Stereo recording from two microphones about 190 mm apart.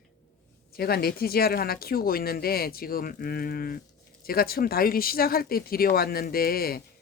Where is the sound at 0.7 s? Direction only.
55° left (ahead or behind).